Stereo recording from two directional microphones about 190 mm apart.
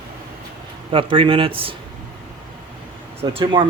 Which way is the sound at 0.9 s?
25° right (ahead or behind).